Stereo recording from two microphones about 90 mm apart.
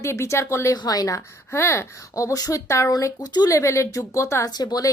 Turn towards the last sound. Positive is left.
turn(degrees=45)  # may be behind; listen again after turning